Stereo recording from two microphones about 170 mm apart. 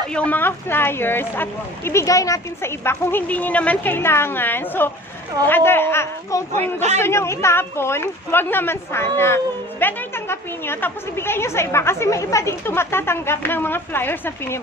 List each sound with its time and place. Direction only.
0.1 s a woman's voice: 10° left (ahead or behind)
6.5 s a man's voice: 40° right (ahead or behind)
7.0 s a woman's voice: 15° left (ahead or behind)